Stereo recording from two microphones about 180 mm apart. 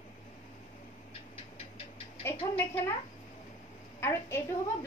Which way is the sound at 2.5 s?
15° left (ahead or behind).